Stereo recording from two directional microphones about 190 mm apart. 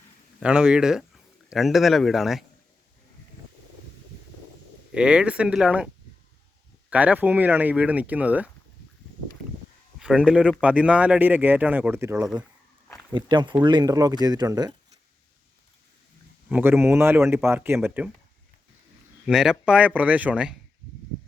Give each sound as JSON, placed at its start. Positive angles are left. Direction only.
{"t": 0.3, "sound": "speech", "side_deg": -5}
{"t": 4.9, "sound": "a man's voice", "side_deg": -5}
{"t": 6.9, "sound": "speech", "side_deg": -10}
{"t": 10.0, "sound": "a man's voice", "side_deg": -5}
{"t": 16.5, "sound": "speech", "side_deg": -10}
{"t": 19.2, "sound": "a man's voice", "side_deg": -5}